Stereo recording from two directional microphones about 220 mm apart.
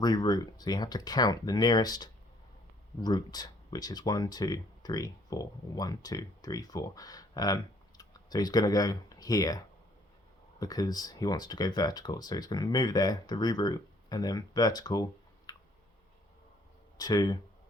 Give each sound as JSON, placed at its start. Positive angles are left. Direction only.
{"t": 0.0, "sound": "speech", "side_deg": 20}
{"t": 17.0, "sound": "speech", "side_deg": 15}